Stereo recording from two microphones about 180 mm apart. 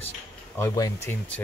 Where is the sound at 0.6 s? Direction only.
15° left (ahead or behind).